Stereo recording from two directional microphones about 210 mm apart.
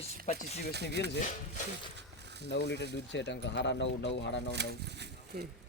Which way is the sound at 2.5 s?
60° left (ahead or behind).